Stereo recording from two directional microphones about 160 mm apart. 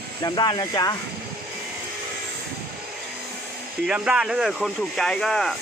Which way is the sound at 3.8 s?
5° right (ahead or behind).